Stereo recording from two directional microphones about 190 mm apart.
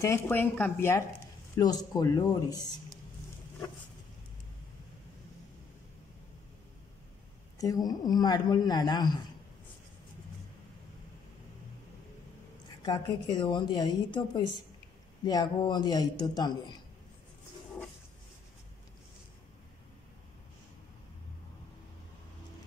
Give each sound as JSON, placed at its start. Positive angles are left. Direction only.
{"t": 0.0, "sound": "a woman's voice", "side_deg": 15}
{"t": 7.5, "sound": "speech", "side_deg": 20}
{"t": 12.8, "sound": "speech", "side_deg": 20}